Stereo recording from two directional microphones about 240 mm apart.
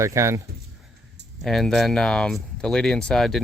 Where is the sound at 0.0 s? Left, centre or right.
Centre.